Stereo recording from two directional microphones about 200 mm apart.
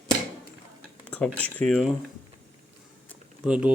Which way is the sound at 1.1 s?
5° left (ahead or behind).